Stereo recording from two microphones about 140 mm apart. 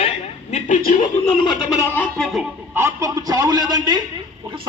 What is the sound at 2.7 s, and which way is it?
A man's voice, 20° right (ahead or behind).